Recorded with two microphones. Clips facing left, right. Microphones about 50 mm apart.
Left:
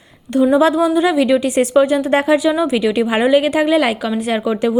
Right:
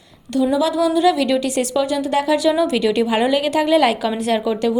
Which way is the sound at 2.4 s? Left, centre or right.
Centre.